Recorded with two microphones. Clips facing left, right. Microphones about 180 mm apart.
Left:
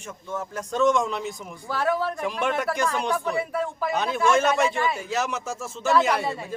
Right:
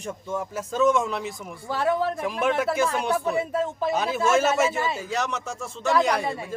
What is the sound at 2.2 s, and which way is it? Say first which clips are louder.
Speech: right 2 dB; 5° right (ahead or behind).